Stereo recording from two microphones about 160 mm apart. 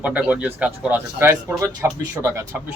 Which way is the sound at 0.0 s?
10° right (ahead or behind).